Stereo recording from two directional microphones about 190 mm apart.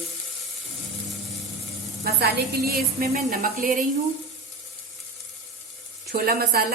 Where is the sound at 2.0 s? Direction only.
55° right (ahead or behind).